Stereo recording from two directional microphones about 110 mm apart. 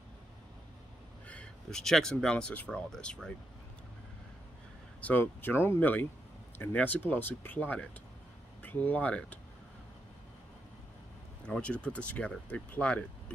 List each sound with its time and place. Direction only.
1.2 s speech: 10° left (ahead or behind)
5.0 s speech: 15° left (ahead or behind)
11.4 s speech: 10° left (ahead or behind)